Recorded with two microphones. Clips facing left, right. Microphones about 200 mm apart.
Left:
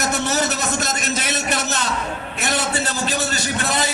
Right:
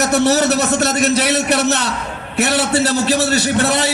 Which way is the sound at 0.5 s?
70° right (ahead or behind).